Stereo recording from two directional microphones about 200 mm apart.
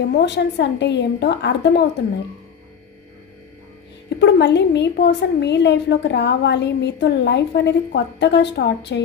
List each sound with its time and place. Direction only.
0.0 s a woman's voice: 55° left (ahead or behind)
4.2 s a woman's voice: 60° left (ahead or behind)